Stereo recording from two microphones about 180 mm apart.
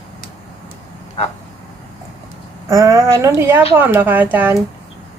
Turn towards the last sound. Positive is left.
turn(degrees=-10)  # may be behind; listen again after turning